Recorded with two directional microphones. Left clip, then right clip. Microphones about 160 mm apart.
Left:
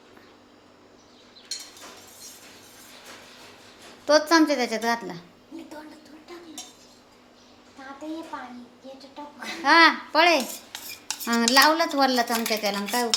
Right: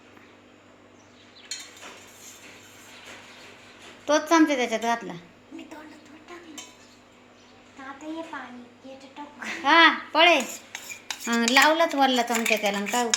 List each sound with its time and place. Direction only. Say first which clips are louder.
4.0 s a woman's voice: left 2 dB; 5° left (ahead or behind)
9.4 s a woman's voice: left 1 dB; 5° left (ahead or behind)